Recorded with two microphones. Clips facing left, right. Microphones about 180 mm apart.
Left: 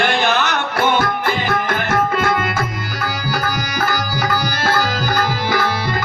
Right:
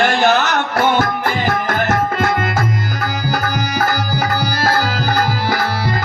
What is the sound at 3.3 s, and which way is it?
Tabla, 40° right (ahead or behind).